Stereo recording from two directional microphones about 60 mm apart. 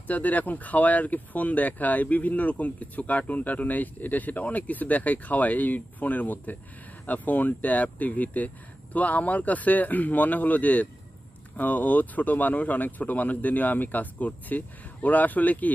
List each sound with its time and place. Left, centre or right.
0.0 s speech: left